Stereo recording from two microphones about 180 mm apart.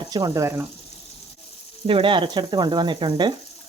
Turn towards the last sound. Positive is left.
turn(degrees=-25)  # may be behind; listen again after turning